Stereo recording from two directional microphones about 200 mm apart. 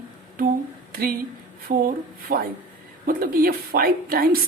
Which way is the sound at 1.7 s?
40° right (ahead or behind).